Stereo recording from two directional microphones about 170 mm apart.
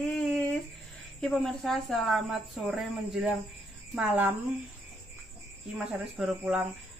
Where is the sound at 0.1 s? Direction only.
Centre (ahead or behind).